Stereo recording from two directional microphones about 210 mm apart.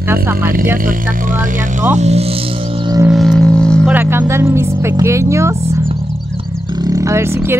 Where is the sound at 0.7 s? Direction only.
40° right (ahead or behind); by 3.1 s 20° right (ahead or behind).